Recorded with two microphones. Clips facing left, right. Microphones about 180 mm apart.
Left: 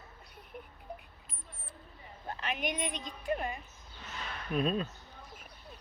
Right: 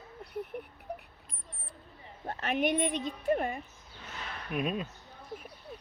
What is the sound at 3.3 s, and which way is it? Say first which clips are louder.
Speech: right 5 dB; 50° right (ahead or behind).